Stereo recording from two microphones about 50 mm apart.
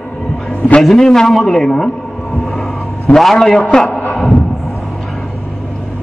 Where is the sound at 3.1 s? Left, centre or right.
Centre.